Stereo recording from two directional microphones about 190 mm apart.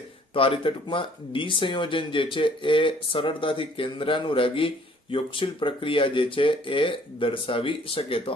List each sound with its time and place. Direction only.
0.3 s speech: 30° left (ahead or behind)